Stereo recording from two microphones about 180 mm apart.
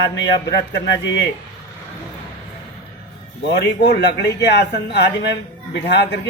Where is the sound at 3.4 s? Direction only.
70° left (ahead or behind).